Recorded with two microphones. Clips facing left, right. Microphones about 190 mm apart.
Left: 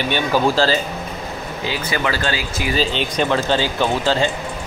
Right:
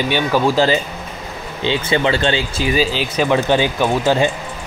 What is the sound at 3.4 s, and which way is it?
Speech, 15° right (ahead or behind).